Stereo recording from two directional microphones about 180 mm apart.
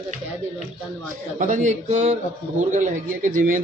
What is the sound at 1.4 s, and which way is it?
Speech, 45° right (ahead or behind).